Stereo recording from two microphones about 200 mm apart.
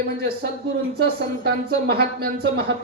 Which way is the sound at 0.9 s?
55° right (ahead or behind).